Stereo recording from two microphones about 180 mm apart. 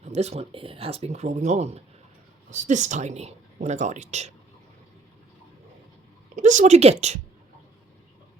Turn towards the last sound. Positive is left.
turn(degrees=-40)  # may be behind; listen again after turning